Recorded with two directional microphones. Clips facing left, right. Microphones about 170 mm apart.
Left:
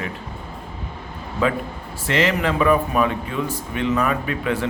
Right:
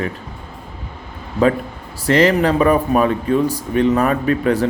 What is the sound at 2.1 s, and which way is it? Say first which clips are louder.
Speech: right 7 dB; 40° right (ahead or behind).